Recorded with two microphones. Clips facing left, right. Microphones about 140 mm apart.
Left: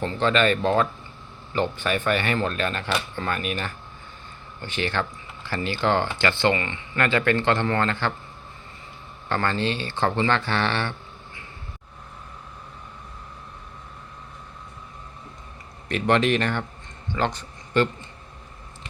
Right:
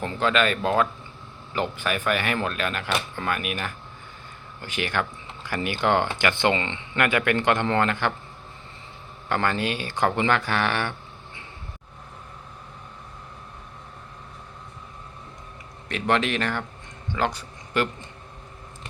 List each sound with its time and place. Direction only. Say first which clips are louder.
0.0 s speech: left 2 dB; 5° right (ahead or behind)
9.3 s speech: even; 10° right (ahead or behind)
15.9 s a man's voice: left 3 dB; centre (ahead or behind)